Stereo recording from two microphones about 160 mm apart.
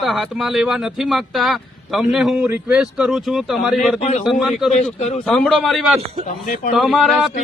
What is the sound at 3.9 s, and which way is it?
Speech, 45° left (ahead or behind).